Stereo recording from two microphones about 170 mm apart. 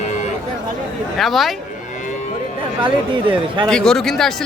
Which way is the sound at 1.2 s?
Centre (ahead or behind).